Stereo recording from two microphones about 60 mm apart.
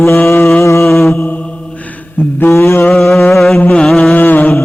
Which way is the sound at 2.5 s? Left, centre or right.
Left.